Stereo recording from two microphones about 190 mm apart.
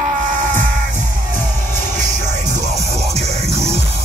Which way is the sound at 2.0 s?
40° right (ahead or behind).